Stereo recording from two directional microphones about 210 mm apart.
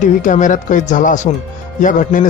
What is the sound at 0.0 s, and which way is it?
A man's voice, 35° left (ahead or behind).